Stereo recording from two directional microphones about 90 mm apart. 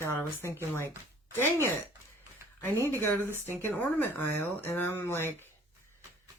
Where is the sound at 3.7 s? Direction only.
20° left (ahead or behind).